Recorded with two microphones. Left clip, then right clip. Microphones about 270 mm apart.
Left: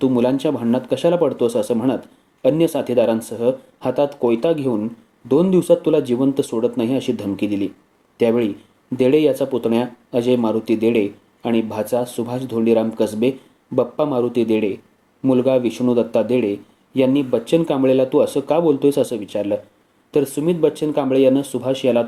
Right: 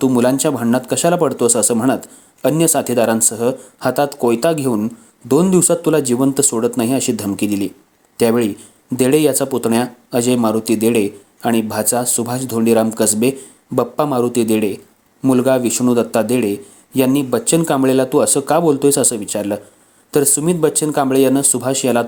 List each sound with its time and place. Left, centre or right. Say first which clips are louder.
0.0 s speech: right 3 dB; right